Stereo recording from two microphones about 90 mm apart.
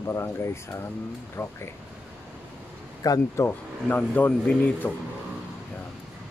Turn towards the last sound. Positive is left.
turn(degrees=15)  # may be behind; listen again after turning